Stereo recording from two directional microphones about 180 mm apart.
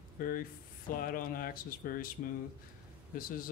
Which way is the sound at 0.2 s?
50° left (ahead or behind).